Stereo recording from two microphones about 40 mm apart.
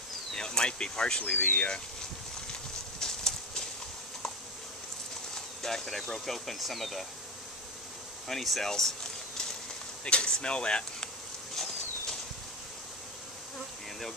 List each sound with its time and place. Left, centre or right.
0.3 s speech: centre
1.3 s speech: left
3.0 s a sound: centre
5.3 s speech: centre
8.3 s speech: centre
10.0 s speech: left
11.5 s a sound: centre